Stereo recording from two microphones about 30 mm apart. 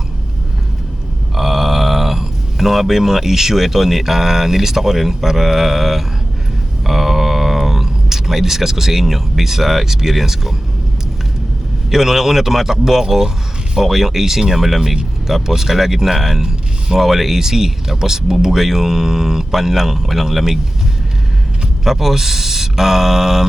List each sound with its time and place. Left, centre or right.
1.4 s speech: centre
11.9 s speech: centre
16.4 s a sound: right
17.0 s speech: centre
21.8 s speech: centre